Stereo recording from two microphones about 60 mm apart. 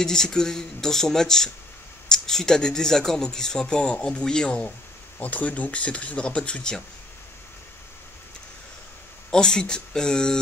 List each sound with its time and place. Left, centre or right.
0.0 s speech: centre
5.2 s speech: left
9.3 s speech: centre